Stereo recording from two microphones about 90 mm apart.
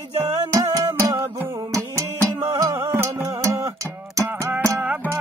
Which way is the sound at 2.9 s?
30° right (ahead or behind).